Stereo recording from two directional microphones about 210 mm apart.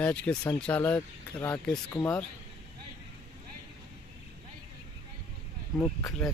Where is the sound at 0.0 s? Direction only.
5° left (ahead or behind).